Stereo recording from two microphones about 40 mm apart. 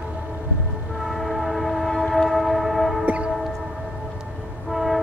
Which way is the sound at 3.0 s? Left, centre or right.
Right.